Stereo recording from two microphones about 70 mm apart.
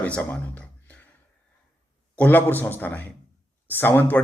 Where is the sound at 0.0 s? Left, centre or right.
Left.